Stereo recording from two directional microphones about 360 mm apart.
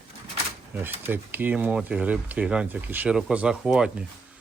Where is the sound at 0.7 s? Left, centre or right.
Centre.